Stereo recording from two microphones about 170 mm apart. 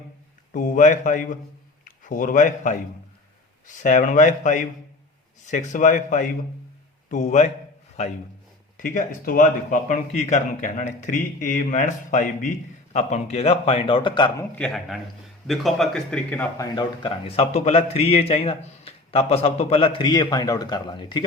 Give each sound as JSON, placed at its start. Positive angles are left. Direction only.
{"t": 0.5, "sound": "a man's voice", "side_deg": 50}
{"t": 8.8, "sound": "a man's voice", "side_deg": 50}
{"t": 14.3, "sound": "a man's voice", "side_deg": 5}
{"t": 16.6, "sound": "a man's voice", "side_deg": 25}